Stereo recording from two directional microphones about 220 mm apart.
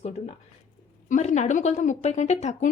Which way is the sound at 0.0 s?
30° left (ahead or behind).